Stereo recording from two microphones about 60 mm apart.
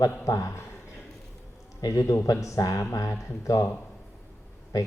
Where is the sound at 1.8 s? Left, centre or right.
Left.